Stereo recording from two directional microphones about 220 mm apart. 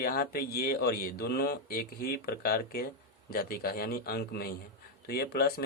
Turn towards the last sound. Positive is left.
turn(degrees=45)  # may be behind; listen again after turning